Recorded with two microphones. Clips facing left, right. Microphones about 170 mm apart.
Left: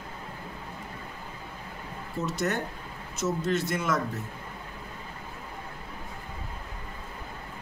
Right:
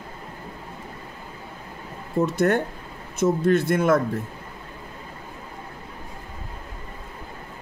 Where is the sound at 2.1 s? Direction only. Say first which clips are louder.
Right 9 dB; 55° right (ahead or behind).